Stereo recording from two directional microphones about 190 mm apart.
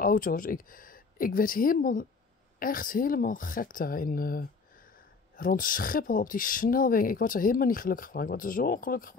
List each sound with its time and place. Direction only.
0.0 s speech: 45° left (ahead or behind)